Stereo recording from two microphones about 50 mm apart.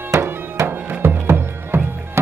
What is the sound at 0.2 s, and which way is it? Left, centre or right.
Music, right.